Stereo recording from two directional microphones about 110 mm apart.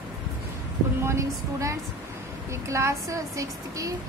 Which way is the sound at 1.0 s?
25° right (ahead or behind).